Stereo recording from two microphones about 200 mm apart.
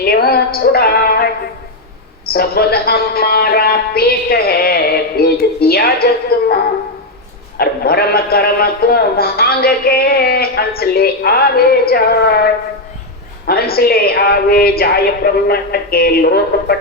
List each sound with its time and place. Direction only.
0.0 s music: 50° left (ahead or behind)
2.3 s a man's voice: 50° left (ahead or behind)
13.5 s a man's voice: 50° left (ahead or behind)